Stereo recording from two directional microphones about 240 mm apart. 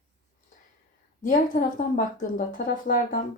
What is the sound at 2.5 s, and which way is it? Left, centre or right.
Speech, left.